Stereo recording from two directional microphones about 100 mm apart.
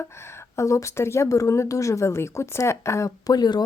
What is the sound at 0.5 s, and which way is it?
Speech, 30° left (ahead or behind).